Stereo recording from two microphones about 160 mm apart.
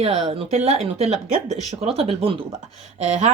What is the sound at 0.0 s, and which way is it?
Speech, 40° right (ahead or behind).